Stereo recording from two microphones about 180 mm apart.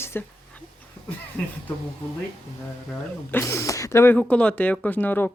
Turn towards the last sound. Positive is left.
turn(degrees=10)  # may be behind; listen again after turning